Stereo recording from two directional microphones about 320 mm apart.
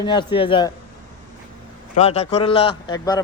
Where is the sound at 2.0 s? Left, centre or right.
Centre.